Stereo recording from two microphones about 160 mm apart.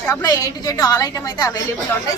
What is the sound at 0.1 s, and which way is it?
A woman's voice, 20° left (ahead or behind).